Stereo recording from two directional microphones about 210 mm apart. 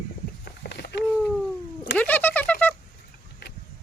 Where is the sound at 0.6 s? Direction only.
50° left (ahead or behind).